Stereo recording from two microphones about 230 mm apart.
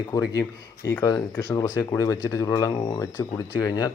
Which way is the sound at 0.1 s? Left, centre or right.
Centre.